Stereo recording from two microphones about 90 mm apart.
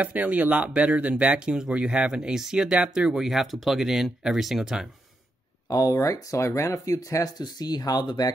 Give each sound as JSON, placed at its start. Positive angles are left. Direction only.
{"t": 0.0, "sound": "speech", "side_deg": -15}
{"t": 5.7, "sound": "speech", "side_deg": 45}
{"t": 7.4, "sound": "speech", "side_deg": 50}